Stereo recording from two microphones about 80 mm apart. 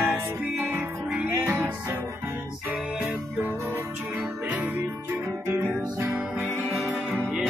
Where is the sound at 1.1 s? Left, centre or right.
Right.